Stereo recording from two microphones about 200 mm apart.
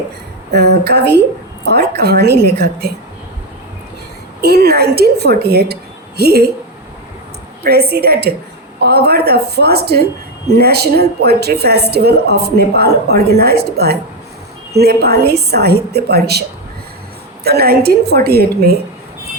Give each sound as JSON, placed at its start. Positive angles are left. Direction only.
{"t": 0.5, "sound": "a woman's voice", "side_deg": -55}
{"t": 4.4, "sound": "a woman's voice", "side_deg": -50}
{"t": 7.6, "sound": "a woman's voice", "side_deg": -50}
{"t": 17.4, "sound": "a woman's voice", "side_deg": -50}